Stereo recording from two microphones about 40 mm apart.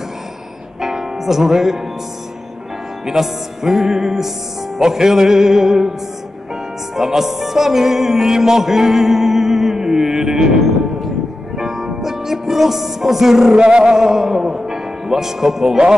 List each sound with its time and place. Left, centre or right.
0.7 s music: centre
3.1 s music: centre
7.0 s music: centre
13.6 s a sound: right
13.9 s a man's voice: centre